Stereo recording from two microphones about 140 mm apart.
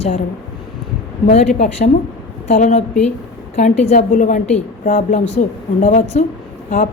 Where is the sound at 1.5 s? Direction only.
55° left (ahead or behind).